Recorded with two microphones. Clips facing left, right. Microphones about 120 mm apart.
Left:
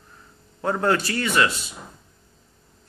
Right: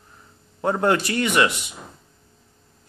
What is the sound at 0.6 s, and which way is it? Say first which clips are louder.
A man's voice: right 2 dB; 20° right (ahead or behind).